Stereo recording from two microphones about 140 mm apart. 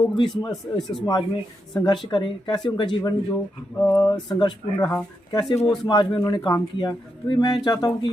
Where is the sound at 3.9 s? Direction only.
30° left (ahead or behind).